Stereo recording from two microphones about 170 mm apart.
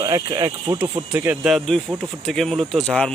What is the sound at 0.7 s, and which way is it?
Speech, 15° right (ahead or behind).